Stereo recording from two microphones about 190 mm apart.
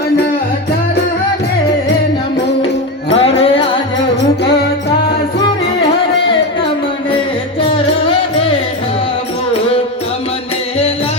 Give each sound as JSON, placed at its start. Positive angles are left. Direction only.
{"t": 3.1, "sound": "music", "side_deg": 30}